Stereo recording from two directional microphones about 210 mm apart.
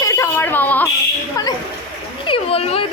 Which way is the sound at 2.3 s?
25° left (ahead or behind).